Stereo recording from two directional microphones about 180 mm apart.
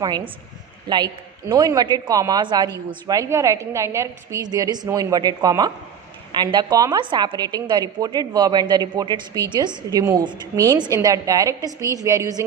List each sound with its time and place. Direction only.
0.9 s a woman's voice: 25° right (ahead or behind)